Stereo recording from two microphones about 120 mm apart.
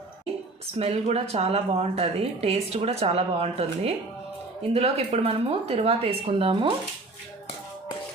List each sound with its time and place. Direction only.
0.8 s speech: 60° right (ahead or behind)